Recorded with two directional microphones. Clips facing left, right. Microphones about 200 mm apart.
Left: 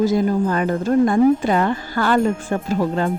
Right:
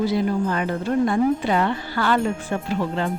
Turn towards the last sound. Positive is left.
turn(degrees=40)  # may be behind; listen again after turning